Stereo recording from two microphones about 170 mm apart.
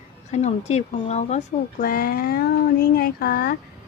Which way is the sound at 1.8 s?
60° left (ahead or behind).